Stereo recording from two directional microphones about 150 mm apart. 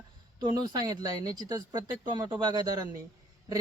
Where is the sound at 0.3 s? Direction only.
25° right (ahead or behind).